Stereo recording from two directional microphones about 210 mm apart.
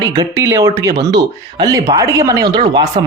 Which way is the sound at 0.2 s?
15° right (ahead or behind).